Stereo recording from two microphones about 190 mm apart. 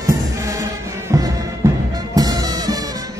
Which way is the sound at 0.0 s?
15° right (ahead or behind).